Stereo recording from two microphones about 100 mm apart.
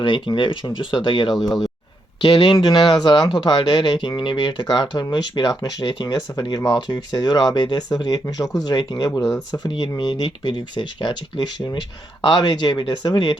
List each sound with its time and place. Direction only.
0.0 s speech: 50° left (ahead or behind)
1.3 s speech: centre (ahead or behind)
2.2 s speech: 55° left (ahead or behind)